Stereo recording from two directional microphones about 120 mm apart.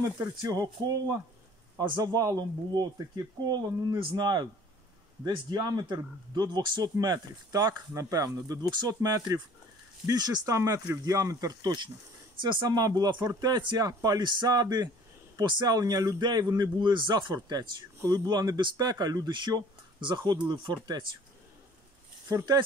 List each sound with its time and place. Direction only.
0.0 s a man's voice: 25° right (ahead or behind)
22.3 s a man's voice: 30° right (ahead or behind)